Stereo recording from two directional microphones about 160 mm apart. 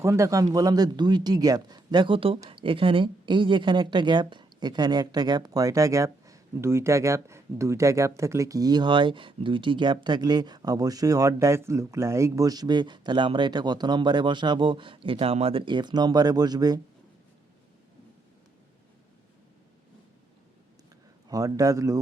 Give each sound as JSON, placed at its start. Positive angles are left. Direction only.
{"t": 0.0, "sound": "speech", "side_deg": -20}
{"t": 21.2, "sound": "speech", "side_deg": -20}